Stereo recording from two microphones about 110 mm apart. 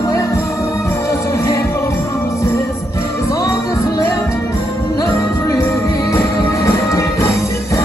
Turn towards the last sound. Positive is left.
turn(degrees=30)  # may be behind; listen again after turning